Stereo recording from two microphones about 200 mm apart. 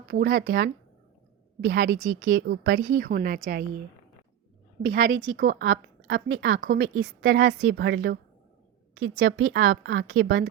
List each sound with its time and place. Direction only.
0.0 s a woman's voice: 50° right (ahead or behind)
2.9 s a woman's voice: 45° right (ahead or behind)
4.8 s a woman's voice: 55° right (ahead or behind); by 10.4 s 70° right (ahead or behind)